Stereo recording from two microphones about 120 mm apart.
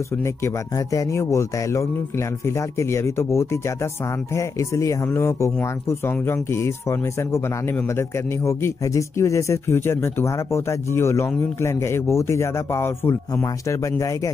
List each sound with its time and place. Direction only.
0.2 s speech: 25° left (ahead or behind)